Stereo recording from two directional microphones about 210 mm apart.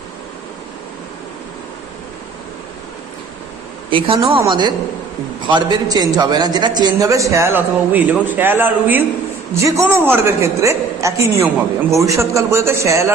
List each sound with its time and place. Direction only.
3.9 s a woman's voice: 25° right (ahead or behind)